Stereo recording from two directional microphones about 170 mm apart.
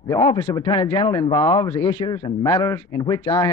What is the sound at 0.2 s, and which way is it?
Speech, 25° left (ahead or behind).